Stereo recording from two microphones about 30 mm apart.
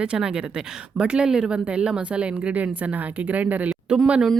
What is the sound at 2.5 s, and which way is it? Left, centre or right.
A woman's voice, right.